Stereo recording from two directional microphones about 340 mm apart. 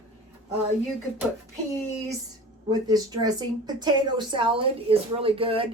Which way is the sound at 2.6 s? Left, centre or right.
Centre.